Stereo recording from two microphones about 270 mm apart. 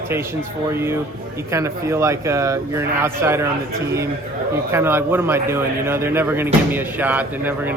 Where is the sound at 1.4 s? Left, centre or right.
Centre.